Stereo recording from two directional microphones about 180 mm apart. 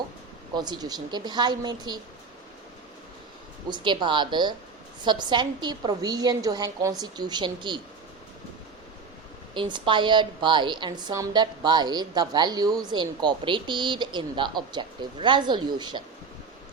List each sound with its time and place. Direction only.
0.5 s a woman's voice: 25° right (ahead or behind)
3.7 s a woman's voice: 25° right (ahead or behind)
9.6 s a woman's voice: 25° right (ahead or behind)